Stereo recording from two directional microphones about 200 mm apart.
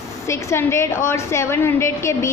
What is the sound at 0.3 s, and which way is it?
A woman's voice, 15° left (ahead or behind).